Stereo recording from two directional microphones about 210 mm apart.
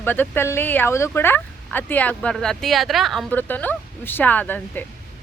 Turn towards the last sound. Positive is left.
turn(degrees=10)  # may be behind; listen again after turning